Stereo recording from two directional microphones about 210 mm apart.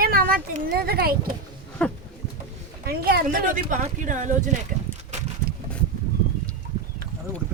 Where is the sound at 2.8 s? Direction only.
45° right (ahead or behind).